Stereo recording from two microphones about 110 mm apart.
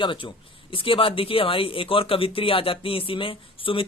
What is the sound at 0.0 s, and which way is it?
Speech, 50° left (ahead or behind).